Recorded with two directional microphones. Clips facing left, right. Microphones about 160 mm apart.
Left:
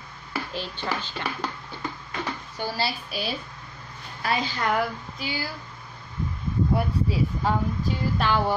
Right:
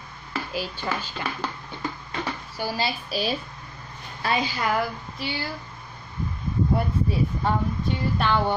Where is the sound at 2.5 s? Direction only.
15° right (ahead or behind).